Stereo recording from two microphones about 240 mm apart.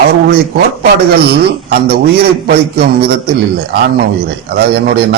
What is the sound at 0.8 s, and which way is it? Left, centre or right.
A man's voice, right.